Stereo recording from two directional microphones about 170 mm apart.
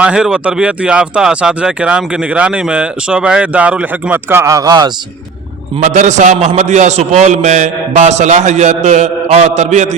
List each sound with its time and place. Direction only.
0.0 s speech: 5° right (ahead or behind); by 4.9 s 25° right (ahead or behind)
5.8 s a man's voice: 45° right (ahead or behind)